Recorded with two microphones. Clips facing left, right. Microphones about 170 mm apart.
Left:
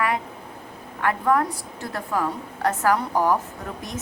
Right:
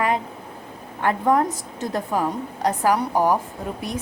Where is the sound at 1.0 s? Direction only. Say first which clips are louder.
Right 2 dB; 25° right (ahead or behind).